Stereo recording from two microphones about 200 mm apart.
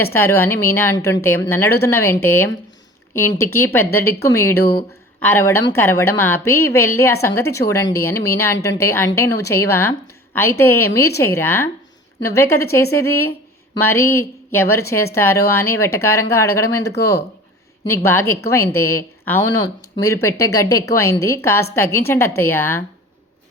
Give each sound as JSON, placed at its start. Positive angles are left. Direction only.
{"t": 0.0, "sound": "a woman's voice", "side_deg": 10}
{"t": 17.8, "sound": "a woman's voice", "side_deg": 15}